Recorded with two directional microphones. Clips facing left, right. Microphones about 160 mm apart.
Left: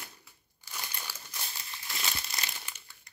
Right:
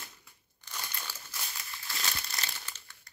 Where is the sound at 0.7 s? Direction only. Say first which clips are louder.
Even; 10° left (ahead or behind).